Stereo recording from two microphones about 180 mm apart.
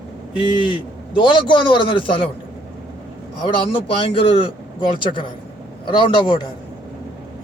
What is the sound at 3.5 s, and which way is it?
A man's voice, 30° left (ahead or behind).